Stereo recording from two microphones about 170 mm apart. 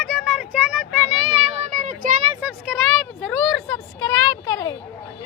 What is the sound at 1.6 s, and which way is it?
Child singing, 45° right (ahead or behind).